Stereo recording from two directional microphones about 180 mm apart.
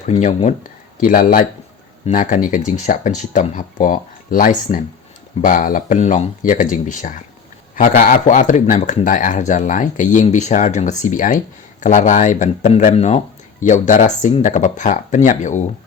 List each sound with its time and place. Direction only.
0.0 s speech: 40° left (ahead or behind)